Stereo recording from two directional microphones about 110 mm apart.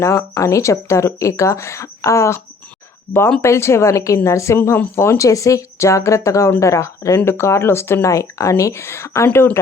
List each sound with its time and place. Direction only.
0.0 s a woman's voice: 30° left (ahead or behind)